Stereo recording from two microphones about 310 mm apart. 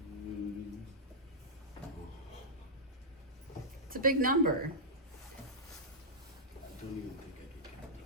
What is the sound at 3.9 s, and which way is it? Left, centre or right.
Speech, right.